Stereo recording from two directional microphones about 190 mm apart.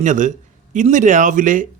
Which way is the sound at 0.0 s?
40° right (ahead or behind).